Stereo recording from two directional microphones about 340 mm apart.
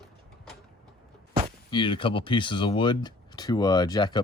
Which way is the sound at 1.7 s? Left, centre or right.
Centre.